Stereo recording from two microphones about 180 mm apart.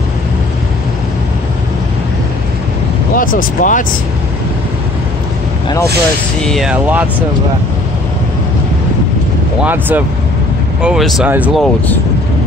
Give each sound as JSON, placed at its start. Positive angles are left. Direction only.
{"t": 3.2, "sound": "speech", "side_deg": 50}
{"t": 6.4, "sound": "speech", "side_deg": 0}
{"t": 9.6, "sound": "speech", "side_deg": -10}